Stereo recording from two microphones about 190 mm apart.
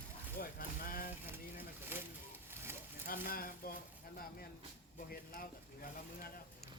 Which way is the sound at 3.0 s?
50° left (ahead or behind).